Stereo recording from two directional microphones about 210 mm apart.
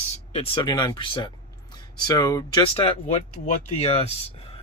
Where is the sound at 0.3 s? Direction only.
25° left (ahead or behind).